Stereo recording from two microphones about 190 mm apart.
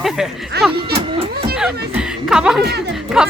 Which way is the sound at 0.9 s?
30° right (ahead or behind).